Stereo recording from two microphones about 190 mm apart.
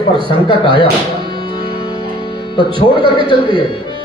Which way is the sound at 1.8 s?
25° left (ahead or behind).